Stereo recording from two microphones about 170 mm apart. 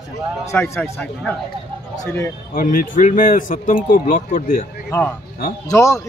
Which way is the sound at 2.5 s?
55° left (ahead or behind).